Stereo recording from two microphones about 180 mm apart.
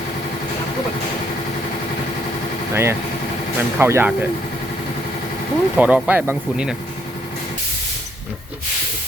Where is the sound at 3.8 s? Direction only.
15° right (ahead or behind).